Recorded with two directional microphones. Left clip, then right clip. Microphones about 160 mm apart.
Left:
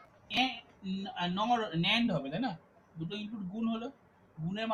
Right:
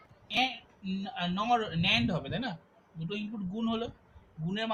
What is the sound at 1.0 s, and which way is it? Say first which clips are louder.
Speech: even; 25° right (ahead or behind).